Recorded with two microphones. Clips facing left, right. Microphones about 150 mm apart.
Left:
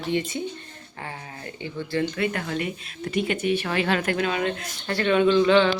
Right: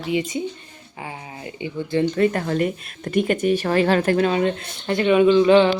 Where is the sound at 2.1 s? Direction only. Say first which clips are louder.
Right 7 dB; 40° right (ahead or behind).